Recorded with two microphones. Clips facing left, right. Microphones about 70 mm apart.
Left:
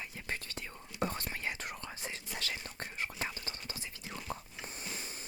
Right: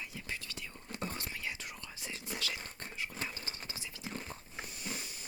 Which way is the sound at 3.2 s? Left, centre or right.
Left.